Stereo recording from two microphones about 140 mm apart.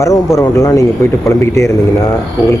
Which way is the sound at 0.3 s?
20° left (ahead or behind).